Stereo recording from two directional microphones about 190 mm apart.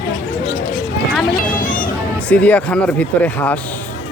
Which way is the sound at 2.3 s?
5° left (ahead or behind).